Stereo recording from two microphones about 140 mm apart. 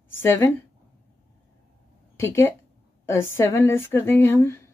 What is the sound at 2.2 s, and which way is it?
Speech, 20° left (ahead or behind).